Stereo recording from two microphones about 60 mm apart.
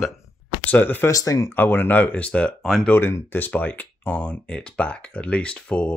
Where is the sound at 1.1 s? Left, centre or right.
Left.